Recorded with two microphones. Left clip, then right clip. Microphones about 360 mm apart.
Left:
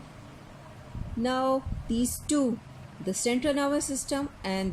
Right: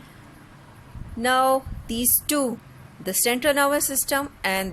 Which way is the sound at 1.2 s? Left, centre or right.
Right.